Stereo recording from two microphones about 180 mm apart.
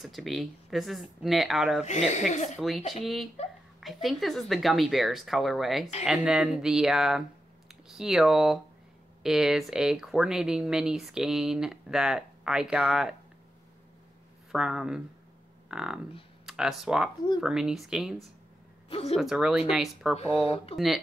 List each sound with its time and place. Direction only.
0.0 s speech: centre (ahead or behind)
1.9 s speech: 40° left (ahead or behind)
2.9 s speech: centre (ahead or behind)
14.5 s speech: 5° right (ahead or behind)
18.9 s speech: 30° left (ahead or behind)
19.1 s speech: 5° right (ahead or behind)
20.4 s speech: 30° left (ahead or behind)
20.7 s speech: centre (ahead or behind)